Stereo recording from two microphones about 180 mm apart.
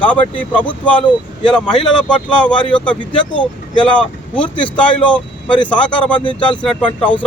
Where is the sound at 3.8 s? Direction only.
5° left (ahead or behind).